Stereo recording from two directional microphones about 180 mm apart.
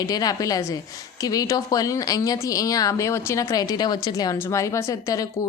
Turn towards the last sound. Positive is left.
turn(degrees=20)  # may be behind; listen again after turning